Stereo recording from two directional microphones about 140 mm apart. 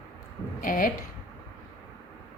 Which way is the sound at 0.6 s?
75° left (ahead or behind).